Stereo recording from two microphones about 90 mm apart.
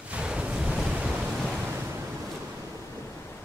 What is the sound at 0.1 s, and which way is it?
Waves, 10° right (ahead or behind).